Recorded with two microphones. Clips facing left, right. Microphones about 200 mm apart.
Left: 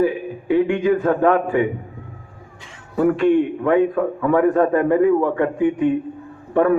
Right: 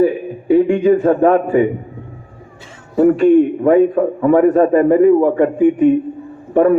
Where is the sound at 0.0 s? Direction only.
40° right (ahead or behind).